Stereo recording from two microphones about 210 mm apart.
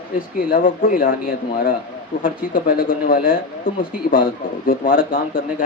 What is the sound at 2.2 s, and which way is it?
Speech, 40° left (ahead or behind).